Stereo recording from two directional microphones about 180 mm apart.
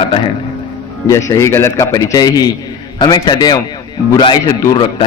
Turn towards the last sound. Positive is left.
turn(degrees=25)  # may be behind; listen again after turning